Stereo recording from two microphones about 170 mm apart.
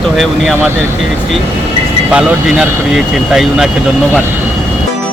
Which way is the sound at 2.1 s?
5° right (ahead or behind).